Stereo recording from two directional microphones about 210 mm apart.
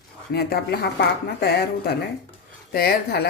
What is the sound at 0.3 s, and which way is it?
A woman's voice, 45° left (ahead or behind).